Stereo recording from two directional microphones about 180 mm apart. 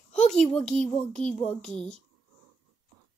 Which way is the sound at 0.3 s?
5° left (ahead or behind).